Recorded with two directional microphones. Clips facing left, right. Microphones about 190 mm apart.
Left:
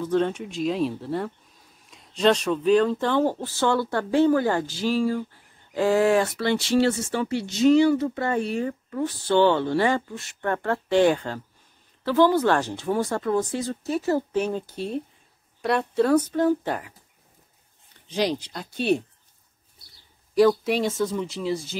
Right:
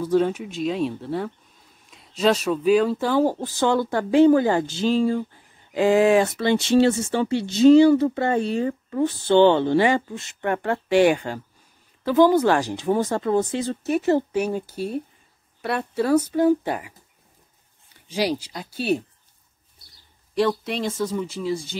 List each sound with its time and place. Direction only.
0.0 s speech: 10° right (ahead or behind)
14.3 s speech: 10° right (ahead or behind)
18.0 s speech: 10° right (ahead or behind)
20.3 s speech: 5° left (ahead or behind)